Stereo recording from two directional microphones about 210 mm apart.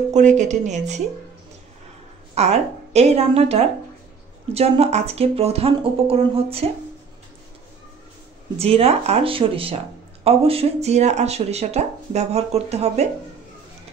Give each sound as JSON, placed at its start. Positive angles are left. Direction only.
{"t": 0.1, "sound": "speech", "side_deg": -35}
{"t": 2.3, "sound": "speech", "side_deg": -30}
{"t": 8.5, "sound": "speech", "side_deg": -30}